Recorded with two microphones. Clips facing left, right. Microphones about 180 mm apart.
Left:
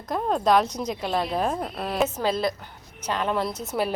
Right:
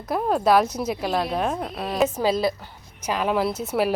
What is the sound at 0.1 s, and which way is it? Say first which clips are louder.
A woman's voice: right 2 dB; 5° right (ahead or behind).